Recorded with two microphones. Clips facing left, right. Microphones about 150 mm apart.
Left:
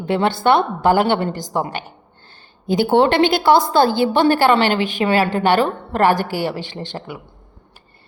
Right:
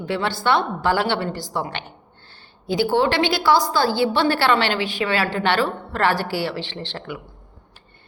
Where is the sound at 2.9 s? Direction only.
55° left (ahead or behind).